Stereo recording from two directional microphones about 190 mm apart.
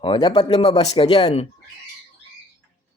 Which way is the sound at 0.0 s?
25° left (ahead or behind).